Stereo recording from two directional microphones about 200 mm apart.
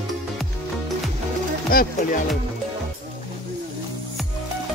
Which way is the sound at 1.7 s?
45° left (ahead or behind).